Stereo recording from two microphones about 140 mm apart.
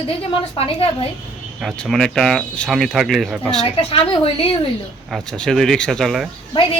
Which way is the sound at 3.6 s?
45° left (ahead or behind).